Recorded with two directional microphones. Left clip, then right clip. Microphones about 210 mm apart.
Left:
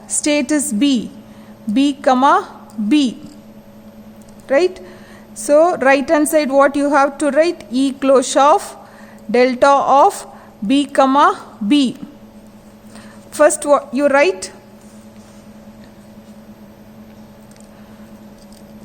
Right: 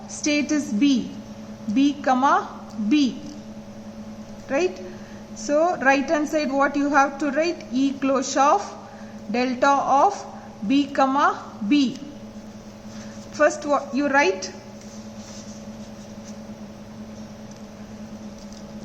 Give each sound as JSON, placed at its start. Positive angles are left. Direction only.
{"t": 0.3, "sound": "a woman's voice", "side_deg": 45}
{"t": 4.4, "sound": "a woman's voice", "side_deg": 45}
{"t": 13.3, "sound": "a woman's voice", "side_deg": 50}